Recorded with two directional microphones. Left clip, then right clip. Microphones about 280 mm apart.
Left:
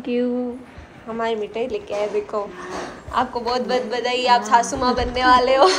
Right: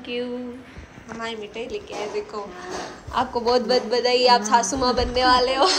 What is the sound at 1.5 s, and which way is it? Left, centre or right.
Speech, centre.